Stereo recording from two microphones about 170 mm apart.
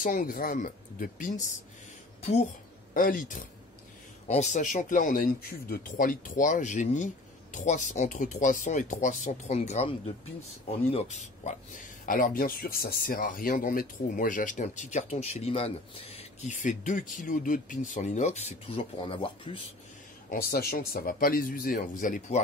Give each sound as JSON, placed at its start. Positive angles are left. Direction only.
{"t": 0.0, "sound": "speech", "side_deg": 50}
{"t": 2.9, "sound": "speech", "side_deg": 55}
{"t": 12.1, "sound": "speech", "side_deg": 55}
{"t": 20.2, "sound": "speech", "side_deg": 60}